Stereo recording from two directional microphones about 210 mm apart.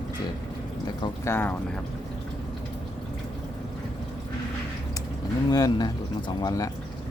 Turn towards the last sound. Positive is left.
turn(degrees=15)  # may be behind; listen again after turning